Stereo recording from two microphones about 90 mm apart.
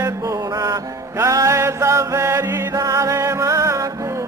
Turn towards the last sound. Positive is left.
turn(degrees=-40)  # may be behind; listen again after turning